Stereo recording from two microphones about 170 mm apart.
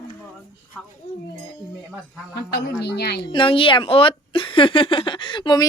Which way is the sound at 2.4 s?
75° left (ahead or behind).